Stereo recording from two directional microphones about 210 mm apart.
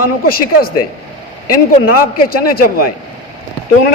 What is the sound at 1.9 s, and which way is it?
Speech, 45° left (ahead or behind).